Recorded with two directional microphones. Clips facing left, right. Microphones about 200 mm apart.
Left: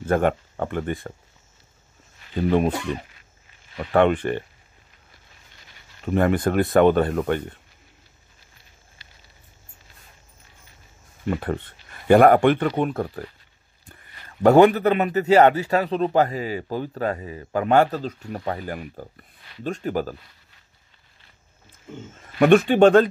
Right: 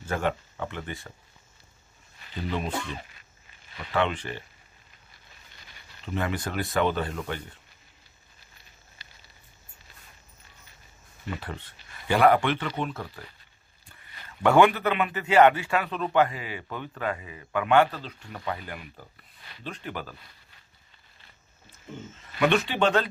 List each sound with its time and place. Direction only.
0.0 s speech: 55° left (ahead or behind)
3.7 s speech: 55° left (ahead or behind)
6.0 s speech: 50° left (ahead or behind)
11.2 s speech: 55° left (ahead or behind)
14.4 s a man's voice: 40° left (ahead or behind)
22.1 s speech: 50° left (ahead or behind)